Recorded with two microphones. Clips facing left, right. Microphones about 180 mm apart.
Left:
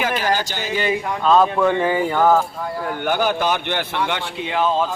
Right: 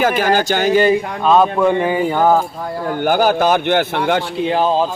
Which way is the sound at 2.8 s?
40° right (ahead or behind).